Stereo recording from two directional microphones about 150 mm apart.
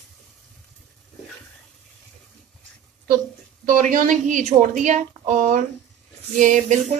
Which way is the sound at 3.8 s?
60° right (ahead or behind).